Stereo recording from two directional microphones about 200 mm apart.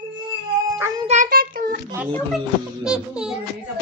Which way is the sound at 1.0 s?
40° right (ahead or behind).